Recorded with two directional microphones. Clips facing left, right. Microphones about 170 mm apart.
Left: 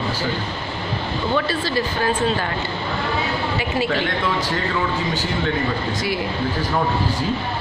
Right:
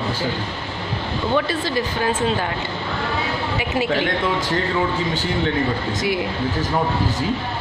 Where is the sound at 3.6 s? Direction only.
15° right (ahead or behind).